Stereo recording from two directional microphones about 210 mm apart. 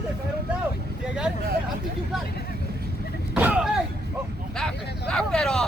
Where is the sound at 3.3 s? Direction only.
5° right (ahead or behind).